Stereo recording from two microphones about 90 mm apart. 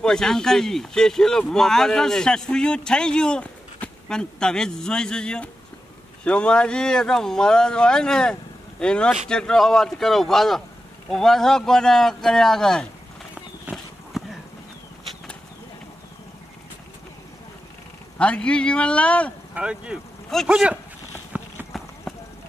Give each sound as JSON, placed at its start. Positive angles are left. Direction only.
{"t": 0.0, "sound": "a man's voice", "side_deg": 5}
{"t": 13.7, "sound": "a sound", "side_deg": -15}
{"t": 14.1, "sound": "a sound", "side_deg": -5}
{"t": 18.1, "sound": "a man's voice", "side_deg": 15}
{"t": 19.5, "sound": "speech", "side_deg": -10}
{"t": 21.3, "sound": "clip-clop", "side_deg": -15}
{"t": 21.7, "sound": "clip-clop", "side_deg": 0}